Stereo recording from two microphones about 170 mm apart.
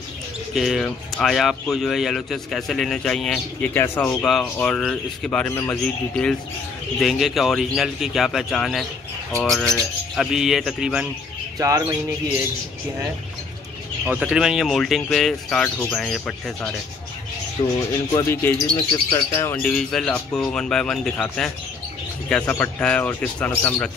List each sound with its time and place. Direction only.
0.6 s speech: centre (ahead or behind)
3.7 s speech: 15° left (ahead or behind); by 11.1 s 5° right (ahead or behind)
11.5 s bird: 20° right (ahead or behind)
14.0 s speech: 5° right (ahead or behind)
17.6 s speech: 30° left (ahead or behind)
18.1 s speech: 15° left (ahead or behind)
19.0 s speech: 25° left (ahead or behind)
19.4 s speech: 5° left (ahead or behind)